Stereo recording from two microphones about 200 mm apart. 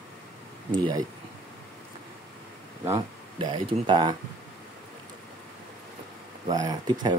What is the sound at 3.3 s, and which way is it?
Speech, 25° right (ahead or behind).